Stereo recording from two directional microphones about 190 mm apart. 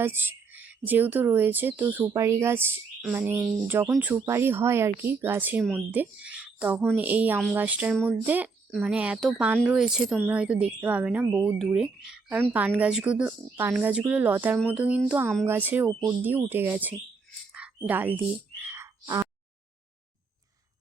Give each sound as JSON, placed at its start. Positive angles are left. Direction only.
{"t": 0.0, "sound": "speech", "side_deg": -10}
{"t": 18.6, "sound": "frog", "side_deg": -15}